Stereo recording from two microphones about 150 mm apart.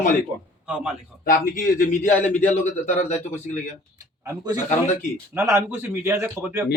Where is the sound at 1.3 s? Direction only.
70° left (ahead or behind); by 3.6 s 50° left (ahead or behind).